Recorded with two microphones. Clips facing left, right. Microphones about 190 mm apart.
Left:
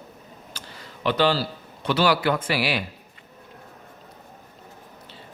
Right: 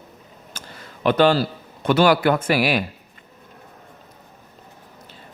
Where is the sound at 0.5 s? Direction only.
45° right (ahead or behind).